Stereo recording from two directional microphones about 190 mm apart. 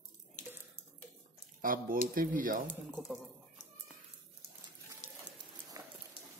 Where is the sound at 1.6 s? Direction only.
45° right (ahead or behind).